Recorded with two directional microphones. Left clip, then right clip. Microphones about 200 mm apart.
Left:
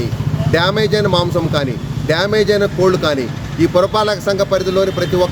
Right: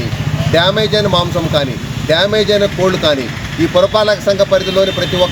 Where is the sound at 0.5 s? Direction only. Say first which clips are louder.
Right 3 dB; 30° left (ahead or behind).